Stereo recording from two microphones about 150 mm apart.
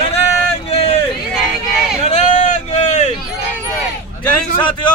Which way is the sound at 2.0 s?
50° left (ahead or behind).